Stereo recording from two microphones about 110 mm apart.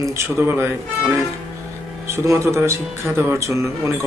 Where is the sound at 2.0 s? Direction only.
25° right (ahead or behind).